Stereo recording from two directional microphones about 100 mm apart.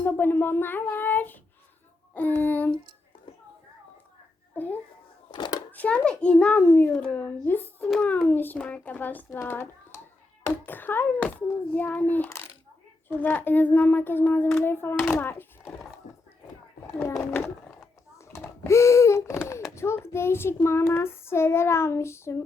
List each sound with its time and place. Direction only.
0.0 s a sound: 20° left (ahead or behind)
2.1 s a child's voice: 20° left (ahead or behind)
4.5 s a child's voice: 15° left (ahead or behind)
5.3 s a sound: 50° left (ahead or behind)
5.7 s a child's voice: 15° left (ahead or behind)
6.6 s child singing: 25° left (ahead or behind)
8.0 s a child's voice: 15° left (ahead or behind)
13.1 s child singing: 15° left (ahead or behind)
15.1 s speech: 20° left (ahead or behind)
16.8 s speech: 25° left (ahead or behind)
17.4 s a sound: 5° left (ahead or behind)
18.2 s a sound: 30° left (ahead or behind)
18.6 s child singing: 30° left (ahead or behind)